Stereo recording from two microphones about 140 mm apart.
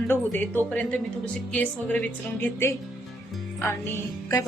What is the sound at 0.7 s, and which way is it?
A woman's voice, 10° left (ahead or behind).